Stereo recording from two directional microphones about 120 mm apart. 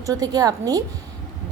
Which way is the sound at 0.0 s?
30° right (ahead or behind).